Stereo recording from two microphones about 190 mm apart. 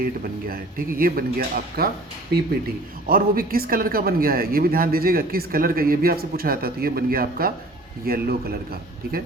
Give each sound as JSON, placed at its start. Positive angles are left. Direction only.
{"t": 0.0, "sound": "speech", "side_deg": -50}
{"t": 3.1, "sound": "speech", "side_deg": -50}